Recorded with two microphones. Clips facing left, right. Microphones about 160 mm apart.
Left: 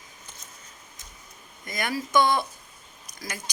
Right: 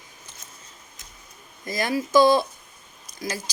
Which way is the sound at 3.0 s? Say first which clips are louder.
Right 7 dB; 25° right (ahead or behind).